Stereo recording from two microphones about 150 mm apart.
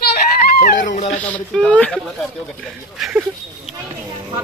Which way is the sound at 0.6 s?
60° left (ahead or behind).